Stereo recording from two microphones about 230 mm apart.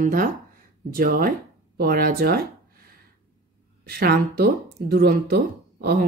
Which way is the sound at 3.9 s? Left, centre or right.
Right.